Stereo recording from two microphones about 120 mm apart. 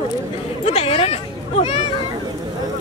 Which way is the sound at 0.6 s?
65° left (ahead or behind).